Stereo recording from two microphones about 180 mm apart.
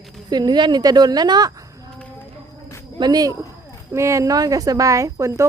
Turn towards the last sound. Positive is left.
turn(degrees=-15)  # may be behind; listen again after turning